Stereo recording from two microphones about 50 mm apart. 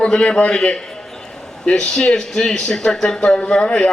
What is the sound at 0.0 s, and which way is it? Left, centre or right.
A man's voice, centre.